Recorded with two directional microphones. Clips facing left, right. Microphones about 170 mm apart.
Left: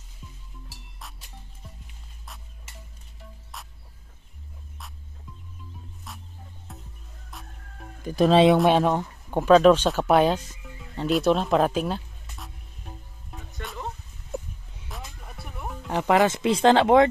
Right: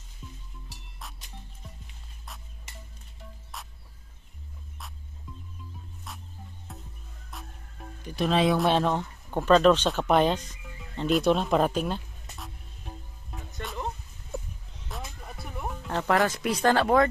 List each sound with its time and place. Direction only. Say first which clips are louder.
0.2 s music: right 1 dB; centre (ahead or behind)
6.1 s music: even; centre (ahead or behind)
8.0 s speech: left 7 dB; 45° left (ahead or behind)
8.6 s a sound: left 4 dB; 10° left (ahead or behind)
14.9 s music: right 2 dB; centre (ahead or behind)
15.9 s speech: left 4 dB; 15° left (ahead or behind)